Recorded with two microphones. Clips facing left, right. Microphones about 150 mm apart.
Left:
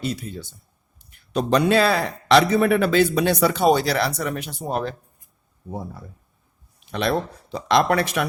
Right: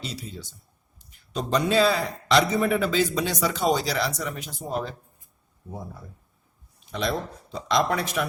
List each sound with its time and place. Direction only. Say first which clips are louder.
0.0 s a man's voice: left 8 dB; 55° left (ahead or behind)
6.7 s speech: left 5 dB; 70° left (ahead or behind)